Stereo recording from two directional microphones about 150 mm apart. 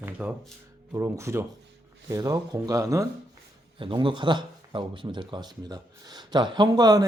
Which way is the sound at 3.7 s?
35° right (ahead or behind).